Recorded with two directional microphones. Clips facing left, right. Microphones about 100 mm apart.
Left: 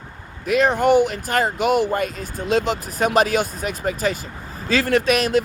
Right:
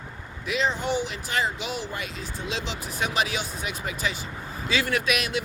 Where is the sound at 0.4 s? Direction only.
55° left (ahead or behind).